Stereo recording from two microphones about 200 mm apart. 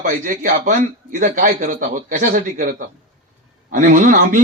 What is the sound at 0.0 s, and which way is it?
A man's voice, 40° right (ahead or behind).